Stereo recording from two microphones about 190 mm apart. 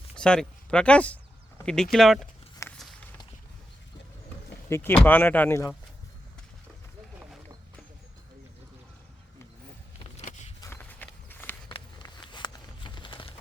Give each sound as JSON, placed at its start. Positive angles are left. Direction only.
{"t": 0.2, "sound": "speech", "side_deg": 5}
{"t": 2.6, "sound": "walk", "side_deg": 15}
{"t": 4.7, "sound": "speech", "side_deg": 10}
{"t": 10.0, "sound": "vehicle", "side_deg": 35}
{"t": 10.6, "sound": "horse", "side_deg": 10}
{"t": 11.7, "sound": "a sound", "side_deg": 25}